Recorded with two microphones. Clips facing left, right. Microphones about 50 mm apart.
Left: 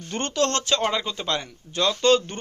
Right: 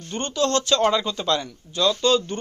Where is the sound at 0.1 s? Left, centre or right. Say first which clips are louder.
Even; left.